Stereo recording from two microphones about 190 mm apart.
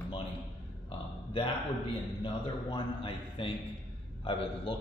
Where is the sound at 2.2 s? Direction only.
25° left (ahead or behind).